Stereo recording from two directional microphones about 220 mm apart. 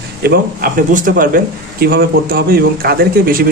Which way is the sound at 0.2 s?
45° right (ahead or behind).